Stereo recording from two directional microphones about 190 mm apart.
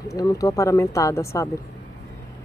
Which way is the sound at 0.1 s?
20° left (ahead or behind).